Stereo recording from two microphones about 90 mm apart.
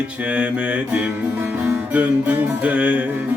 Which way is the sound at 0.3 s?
15° right (ahead or behind).